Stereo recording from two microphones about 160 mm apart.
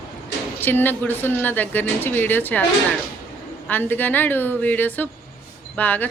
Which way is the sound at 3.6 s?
10° left (ahead or behind).